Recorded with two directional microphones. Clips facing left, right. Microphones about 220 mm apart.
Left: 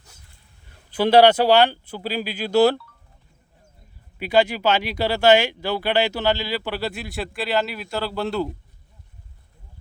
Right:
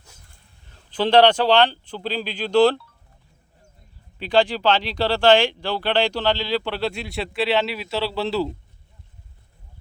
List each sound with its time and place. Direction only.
0.9 s speech: 10° left (ahead or behind)
4.2 s speech: 10° left (ahead or behind)